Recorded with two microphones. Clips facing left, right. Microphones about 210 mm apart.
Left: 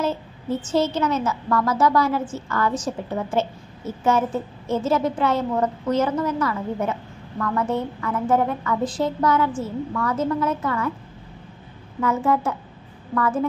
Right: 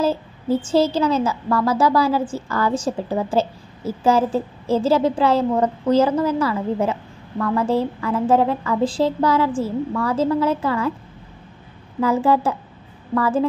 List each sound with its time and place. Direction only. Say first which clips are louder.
0.0 s a sound: right 4 dB; 30° right (ahead or behind)
0.7 s a woman's voice: right 3 dB; 30° right (ahead or behind)
12.0 s a woman's voice: right 4 dB; 30° right (ahead or behind)